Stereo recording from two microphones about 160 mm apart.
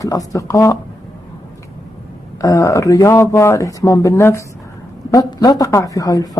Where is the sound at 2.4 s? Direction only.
20° left (ahead or behind).